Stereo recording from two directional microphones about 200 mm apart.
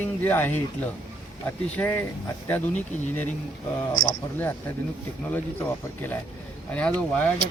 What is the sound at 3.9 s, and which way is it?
Speech, 20° left (ahead or behind).